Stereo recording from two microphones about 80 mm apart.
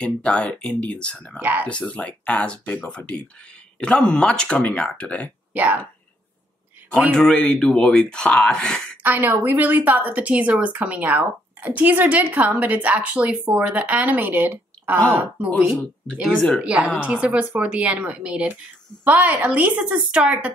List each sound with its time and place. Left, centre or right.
0.0 s speech: centre
1.4 s a woman's voice: right
1.7 s speech: centre
3.8 s speech: centre
5.5 s speech: right
7.2 s speech: centre
9.0 s a woman's voice: right
16.1 s speech: centre
16.6 s a woman's voice: centre